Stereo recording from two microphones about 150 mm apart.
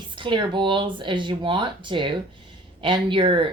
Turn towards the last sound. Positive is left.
turn(degrees=-35)  # may be behind; listen again after turning